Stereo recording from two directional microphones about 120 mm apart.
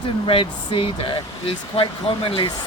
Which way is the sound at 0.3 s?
50° left (ahead or behind).